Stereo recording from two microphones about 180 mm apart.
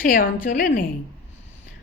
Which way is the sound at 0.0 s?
50° left (ahead or behind).